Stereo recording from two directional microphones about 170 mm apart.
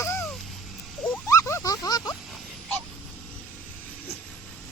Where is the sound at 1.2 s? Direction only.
20° left (ahead or behind).